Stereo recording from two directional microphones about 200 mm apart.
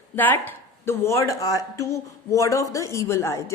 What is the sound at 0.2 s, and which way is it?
Speech, 10° left (ahead or behind).